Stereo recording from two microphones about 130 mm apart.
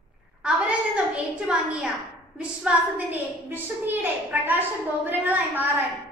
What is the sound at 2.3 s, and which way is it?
A woman's voice, 10° right (ahead or behind).